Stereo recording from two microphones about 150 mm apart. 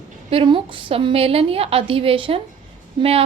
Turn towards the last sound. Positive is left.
turn(degrees=-40)  # may be behind; listen again after turning